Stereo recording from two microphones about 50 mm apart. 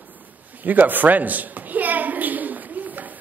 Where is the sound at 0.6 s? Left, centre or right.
Right.